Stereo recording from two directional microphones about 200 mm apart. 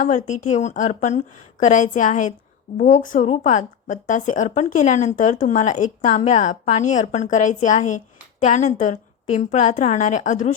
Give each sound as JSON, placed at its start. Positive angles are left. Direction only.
{"t": 0.0, "sound": "speech", "side_deg": 35}